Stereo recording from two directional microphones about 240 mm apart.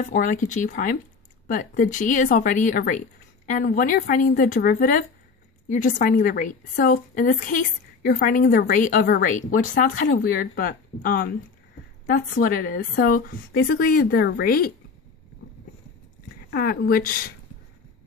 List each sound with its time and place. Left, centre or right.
0.0 s a woman's voice: left
12.4 s a woman's voice: left
16.4 s a woman's voice: left